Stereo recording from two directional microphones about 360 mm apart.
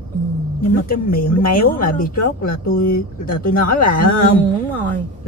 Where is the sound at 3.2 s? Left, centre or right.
Left.